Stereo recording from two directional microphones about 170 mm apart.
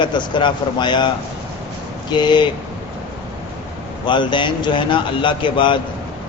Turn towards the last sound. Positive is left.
turn(degrees=30)  # may be behind; listen again after turning